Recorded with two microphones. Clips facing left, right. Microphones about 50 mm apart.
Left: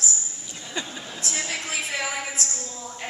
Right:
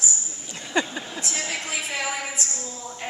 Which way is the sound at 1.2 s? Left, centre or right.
Centre.